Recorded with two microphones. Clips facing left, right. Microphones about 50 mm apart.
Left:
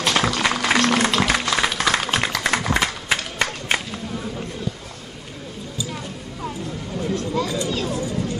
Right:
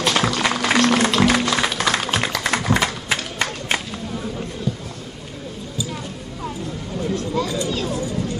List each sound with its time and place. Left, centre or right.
0.3 s music: left
1.7 s music: left
2.4 s a sound: left
3.1 s run: left
3.7 s a sound: centre
7.3 s children playing: centre